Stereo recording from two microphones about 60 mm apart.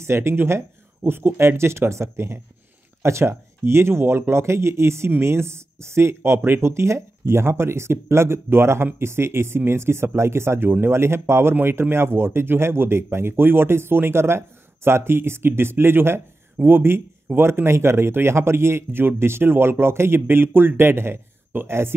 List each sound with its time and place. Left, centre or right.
0.0 s speech: right